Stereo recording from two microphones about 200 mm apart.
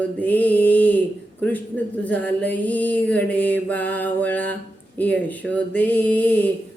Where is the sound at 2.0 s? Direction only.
5° left (ahead or behind).